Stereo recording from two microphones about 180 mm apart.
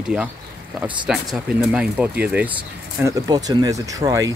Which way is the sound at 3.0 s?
20° right (ahead or behind).